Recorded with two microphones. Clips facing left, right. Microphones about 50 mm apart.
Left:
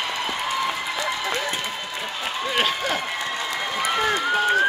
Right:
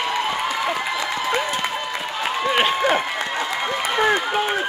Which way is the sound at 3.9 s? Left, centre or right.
Right.